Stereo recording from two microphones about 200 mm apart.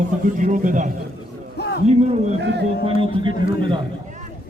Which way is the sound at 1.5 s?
55° left (ahead or behind).